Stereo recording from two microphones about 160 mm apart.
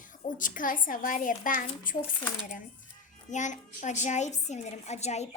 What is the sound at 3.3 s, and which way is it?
A woman's voice, 50° left (ahead or behind).